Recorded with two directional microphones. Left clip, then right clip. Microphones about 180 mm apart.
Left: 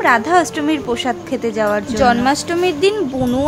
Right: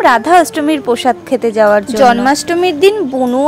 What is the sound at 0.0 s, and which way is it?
A woman's voice, 35° right (ahead or behind).